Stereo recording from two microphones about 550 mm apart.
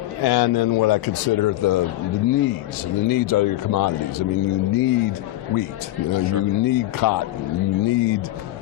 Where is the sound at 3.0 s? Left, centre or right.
Left.